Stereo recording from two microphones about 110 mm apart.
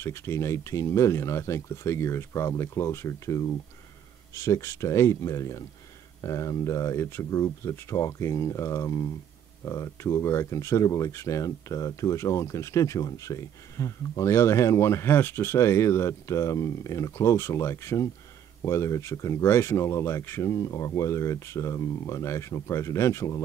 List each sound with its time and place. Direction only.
0.0 s speech: 25° left (ahead or behind)